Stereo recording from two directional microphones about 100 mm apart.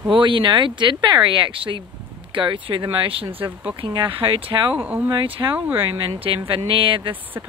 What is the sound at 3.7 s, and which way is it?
Speech, 50° right (ahead or behind).